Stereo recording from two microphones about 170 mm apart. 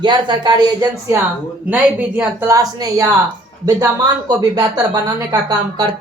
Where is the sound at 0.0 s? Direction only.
25° right (ahead or behind).